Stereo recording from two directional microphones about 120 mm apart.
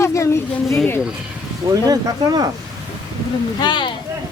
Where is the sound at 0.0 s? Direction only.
25° left (ahead or behind).